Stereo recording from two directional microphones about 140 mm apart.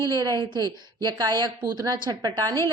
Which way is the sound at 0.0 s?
30° right (ahead or behind).